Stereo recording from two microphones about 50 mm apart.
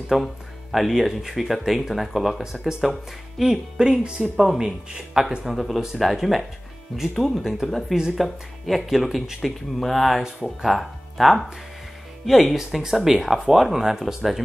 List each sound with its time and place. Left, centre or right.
0.1 s speech: centre
3.7 s speech: centre
5.4 s speech: centre